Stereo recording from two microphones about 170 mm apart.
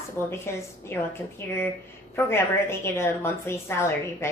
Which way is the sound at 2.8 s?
15° left (ahead or behind).